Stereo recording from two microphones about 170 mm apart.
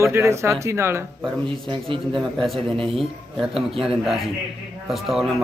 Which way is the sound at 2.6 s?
30° right (ahead or behind).